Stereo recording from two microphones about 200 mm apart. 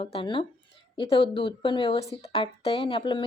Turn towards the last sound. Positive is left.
turn(degrees=25)  # may be behind; listen again after turning